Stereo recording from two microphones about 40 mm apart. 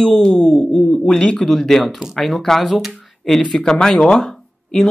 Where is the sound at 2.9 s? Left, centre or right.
Centre.